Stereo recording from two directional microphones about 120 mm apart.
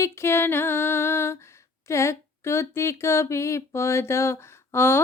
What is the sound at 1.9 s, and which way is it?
Speech, 25° left (ahead or behind).